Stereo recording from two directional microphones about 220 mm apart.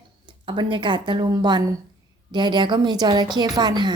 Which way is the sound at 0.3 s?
20° right (ahead or behind).